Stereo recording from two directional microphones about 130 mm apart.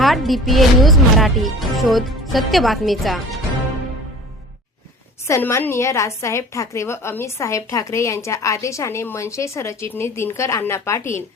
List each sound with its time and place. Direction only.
0.0 s speech: centre (ahead or behind)
5.3 s a woman's voice: 20° left (ahead or behind)